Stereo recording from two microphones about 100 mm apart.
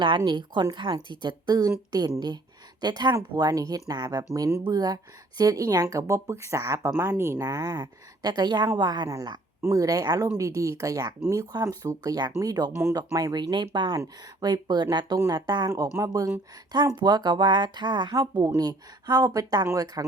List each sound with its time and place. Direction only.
0.3 s a woman's voice: 50° right (ahead or behind)
12.7 s speech: 30° right (ahead or behind)
13.0 s a woman's voice: 40° right (ahead or behind)